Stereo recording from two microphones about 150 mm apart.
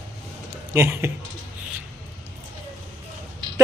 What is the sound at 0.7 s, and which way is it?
Speech, 15° right (ahead or behind).